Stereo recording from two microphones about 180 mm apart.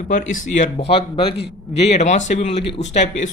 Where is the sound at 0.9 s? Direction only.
30° left (ahead or behind).